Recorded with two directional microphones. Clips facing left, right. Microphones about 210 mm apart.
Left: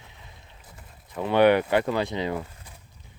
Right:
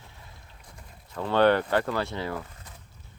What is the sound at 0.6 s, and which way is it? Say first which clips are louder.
Speech: right 1 dB; 10° left (ahead or behind).